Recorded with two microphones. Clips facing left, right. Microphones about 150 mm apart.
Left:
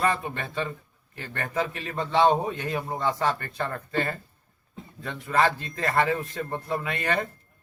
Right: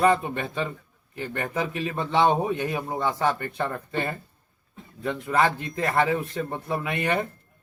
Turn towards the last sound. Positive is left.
turn(degrees=-20)  # may be behind; listen again after turning